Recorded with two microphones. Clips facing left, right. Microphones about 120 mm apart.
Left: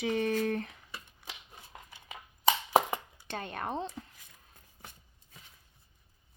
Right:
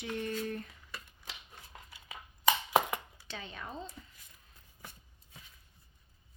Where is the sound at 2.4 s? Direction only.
30° left (ahead or behind).